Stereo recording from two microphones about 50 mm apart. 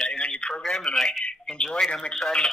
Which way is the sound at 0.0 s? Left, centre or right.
Centre.